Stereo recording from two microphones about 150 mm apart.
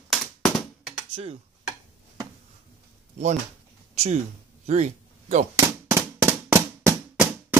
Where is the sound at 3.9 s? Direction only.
45° right (ahead or behind).